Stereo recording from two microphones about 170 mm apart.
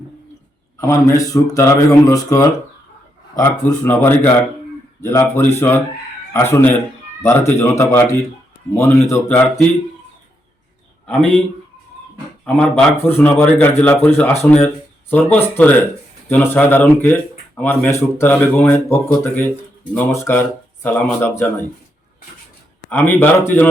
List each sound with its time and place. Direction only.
0.8 s speech: 20° left (ahead or behind)
9.3 s speech: 5° left (ahead or behind)
11.0 s a man's voice: 5° left (ahead or behind)
12.5 s speech: 5° left (ahead or behind)
22.9 s speech: 10° left (ahead or behind)